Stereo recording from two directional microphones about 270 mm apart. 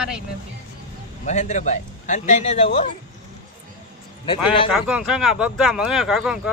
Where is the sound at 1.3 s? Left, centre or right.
Left.